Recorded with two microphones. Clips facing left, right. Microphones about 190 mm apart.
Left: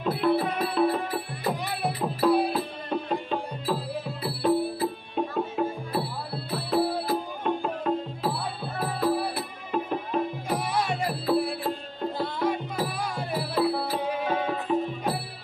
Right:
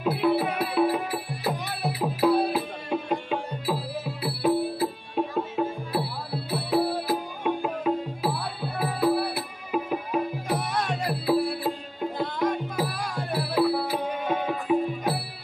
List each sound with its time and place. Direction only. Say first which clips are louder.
0.0 s music: right 1 dB; 5° right (ahead or behind)
10.6 s music: left 1 dB; 10° left (ahead or behind)
11.2 s music: right 2 dB; 5° right (ahead or behind)
12.2 s music: right 1 dB; 5° left (ahead or behind)
13.3 s music: right 3 dB; 10° right (ahead or behind)
14.0 s music: even; centre (ahead or behind)